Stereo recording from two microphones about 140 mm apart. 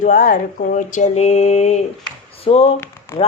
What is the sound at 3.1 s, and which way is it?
Speech, 20° left (ahead or behind).